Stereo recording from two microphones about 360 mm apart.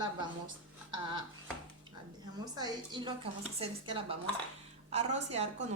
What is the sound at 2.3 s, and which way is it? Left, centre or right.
A woman's voice, centre.